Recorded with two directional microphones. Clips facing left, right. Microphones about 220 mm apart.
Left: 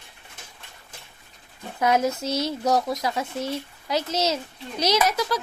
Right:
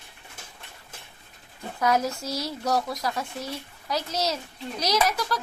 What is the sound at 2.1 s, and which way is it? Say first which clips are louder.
Speech: left 5 dB; 20° left (ahead or behind).